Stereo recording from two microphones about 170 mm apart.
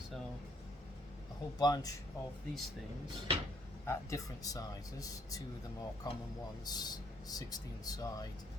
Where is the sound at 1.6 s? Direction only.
20° left (ahead or behind).